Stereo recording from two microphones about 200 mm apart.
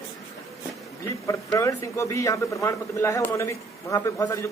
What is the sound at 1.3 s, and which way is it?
A man's voice, 15° left (ahead or behind).